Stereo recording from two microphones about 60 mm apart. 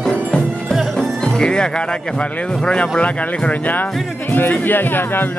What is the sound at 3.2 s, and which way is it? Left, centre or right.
Speech, left.